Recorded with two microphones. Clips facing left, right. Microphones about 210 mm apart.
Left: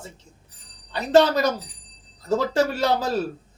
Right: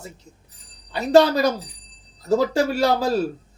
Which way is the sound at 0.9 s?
10° right (ahead or behind).